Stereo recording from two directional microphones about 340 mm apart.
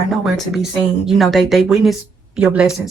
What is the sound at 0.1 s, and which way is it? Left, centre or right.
Speech, centre.